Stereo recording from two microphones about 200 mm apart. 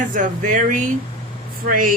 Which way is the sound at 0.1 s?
40° right (ahead or behind).